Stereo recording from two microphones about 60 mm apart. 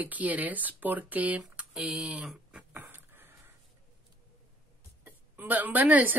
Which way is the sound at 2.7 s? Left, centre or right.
Right.